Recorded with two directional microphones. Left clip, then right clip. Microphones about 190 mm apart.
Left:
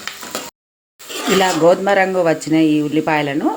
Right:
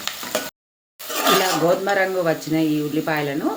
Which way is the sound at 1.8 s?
35° left (ahead or behind).